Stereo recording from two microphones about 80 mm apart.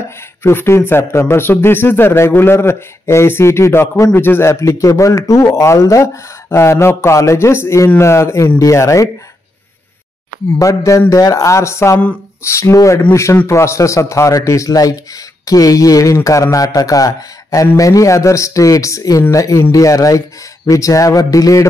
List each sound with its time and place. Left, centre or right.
0.4 s a man's voice: left
10.6 s a man's voice: left